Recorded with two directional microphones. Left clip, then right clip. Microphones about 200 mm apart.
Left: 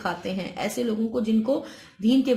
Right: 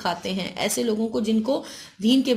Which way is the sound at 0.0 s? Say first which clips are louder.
Right 2 dB; 35° right (ahead or behind).